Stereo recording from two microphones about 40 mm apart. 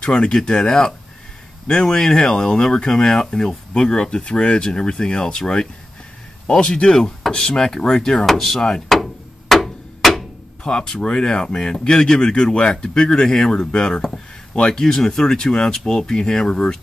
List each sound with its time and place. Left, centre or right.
0.0 s speech: left
8.3 s speech: centre
8.8 s a sound: centre
10.6 s speech: left